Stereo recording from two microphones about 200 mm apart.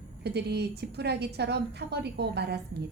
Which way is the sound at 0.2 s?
55° right (ahead or behind).